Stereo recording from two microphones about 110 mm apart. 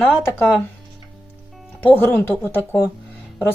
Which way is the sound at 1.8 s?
20° left (ahead or behind).